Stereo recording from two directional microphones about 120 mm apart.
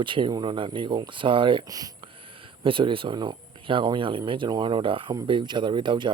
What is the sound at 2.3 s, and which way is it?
Speech, 45° right (ahead or behind).